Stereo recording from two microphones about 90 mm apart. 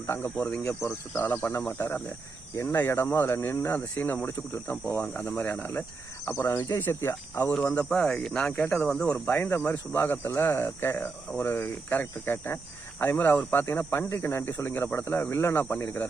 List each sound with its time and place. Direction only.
0.1 s speech: 25° left (ahead or behind)
7.5 s speech: 15° left (ahead or behind)